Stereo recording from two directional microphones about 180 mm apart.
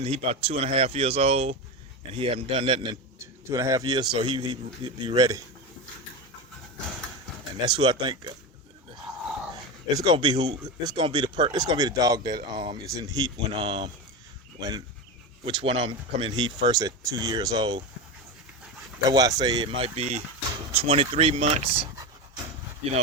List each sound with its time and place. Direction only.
0.0 s speech: 35° right (ahead or behind)
3.5 s speech: 20° right (ahead or behind)
7.6 s speech: 30° right (ahead or behind)
9.9 s speech: 25° right (ahead or behind)
15.4 s speech: 30° right (ahead or behind)
19.1 s speech: 20° right (ahead or behind)